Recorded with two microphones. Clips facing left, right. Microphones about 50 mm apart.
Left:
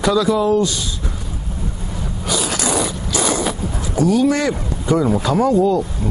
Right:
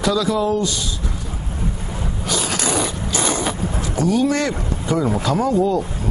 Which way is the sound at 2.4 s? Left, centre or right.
Centre.